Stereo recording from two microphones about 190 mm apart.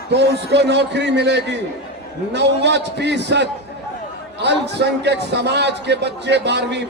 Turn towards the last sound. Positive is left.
turn(degrees=-65)  # may be behind; listen again after turning